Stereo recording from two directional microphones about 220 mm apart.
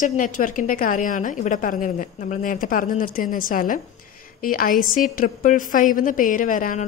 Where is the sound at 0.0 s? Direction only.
35° left (ahead or behind).